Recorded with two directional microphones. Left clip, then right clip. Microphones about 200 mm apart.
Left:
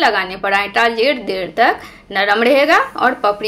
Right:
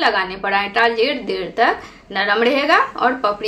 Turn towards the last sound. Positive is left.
turn(degrees=30)  # may be behind; listen again after turning